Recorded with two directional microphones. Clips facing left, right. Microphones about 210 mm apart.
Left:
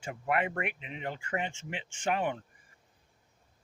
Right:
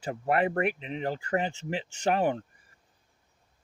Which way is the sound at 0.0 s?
35° right (ahead or behind).